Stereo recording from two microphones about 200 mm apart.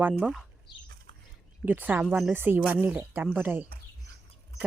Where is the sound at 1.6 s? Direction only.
10° right (ahead or behind).